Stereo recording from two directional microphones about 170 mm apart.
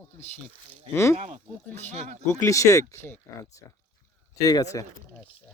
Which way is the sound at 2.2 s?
20° left (ahead or behind).